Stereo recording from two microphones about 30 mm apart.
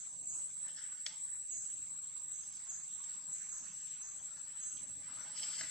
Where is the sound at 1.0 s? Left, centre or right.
Left.